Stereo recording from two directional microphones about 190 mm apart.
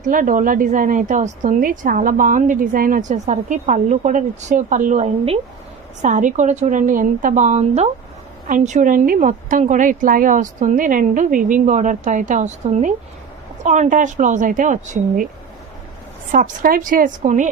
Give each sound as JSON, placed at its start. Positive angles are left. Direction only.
{"t": 0.0, "sound": "a woman's voice", "side_deg": -45}
{"t": 16.3, "sound": "a woman's voice", "side_deg": -45}